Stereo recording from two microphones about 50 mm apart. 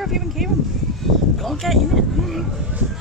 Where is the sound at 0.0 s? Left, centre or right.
Centre.